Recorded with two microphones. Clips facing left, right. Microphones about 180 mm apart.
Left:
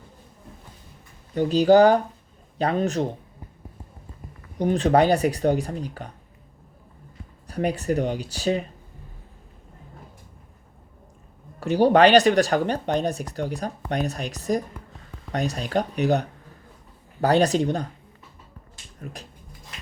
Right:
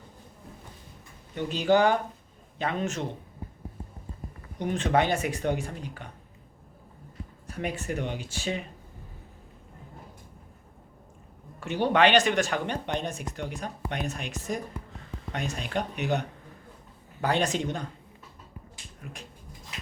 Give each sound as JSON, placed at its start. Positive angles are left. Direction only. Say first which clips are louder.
{"t": 1.4, "sound": "speech", "louder": "left 8 dB", "side_deg": 35}
{"t": 4.5, "sound": "speech", "louder": "left 6 dB", "side_deg": 35}
{"t": 7.4, "sound": "speech", "louder": "left 8 dB", "side_deg": 35}
{"t": 11.6, "sound": "speech", "louder": "left 7 dB", "side_deg": 35}
{"t": 19.1, "sound": "speech", "louder": "left 5 dB", "side_deg": 40}